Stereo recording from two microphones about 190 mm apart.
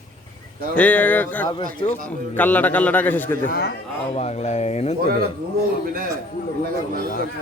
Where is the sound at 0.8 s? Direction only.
5° left (ahead or behind).